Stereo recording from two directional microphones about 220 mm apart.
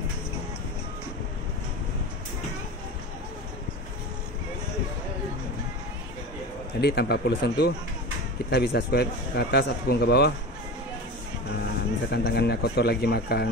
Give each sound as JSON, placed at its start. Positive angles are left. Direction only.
{"t": 6.8, "sound": "speech", "side_deg": 45}
{"t": 12.1, "sound": "speech", "side_deg": 45}